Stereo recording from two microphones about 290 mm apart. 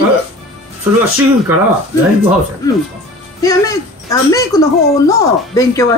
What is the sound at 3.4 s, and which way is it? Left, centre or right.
Speech, centre.